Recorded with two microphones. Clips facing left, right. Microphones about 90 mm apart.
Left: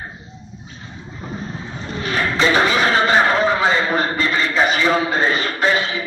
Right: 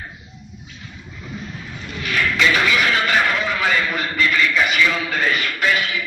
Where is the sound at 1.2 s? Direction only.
35° left (ahead or behind).